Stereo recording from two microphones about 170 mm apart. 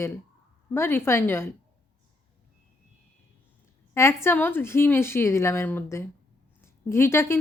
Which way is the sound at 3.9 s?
15° left (ahead or behind).